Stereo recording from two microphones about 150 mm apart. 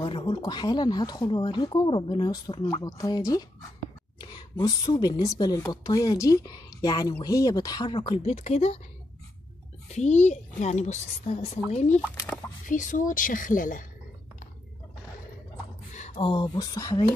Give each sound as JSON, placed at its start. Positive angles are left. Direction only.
{"t": 0.0, "sound": "a woman's voice", "side_deg": 35}
{"t": 9.9, "sound": "a woman's voice", "side_deg": 50}
{"t": 12.6, "sound": "a woman's voice", "side_deg": 60}
{"t": 15.9, "sound": "speech", "side_deg": 45}